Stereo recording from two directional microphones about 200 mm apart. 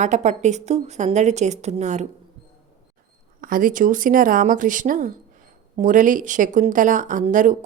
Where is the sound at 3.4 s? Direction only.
45° right (ahead or behind).